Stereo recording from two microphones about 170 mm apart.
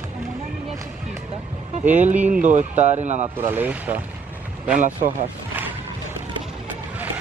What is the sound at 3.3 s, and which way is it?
Speech, 10° right (ahead or behind).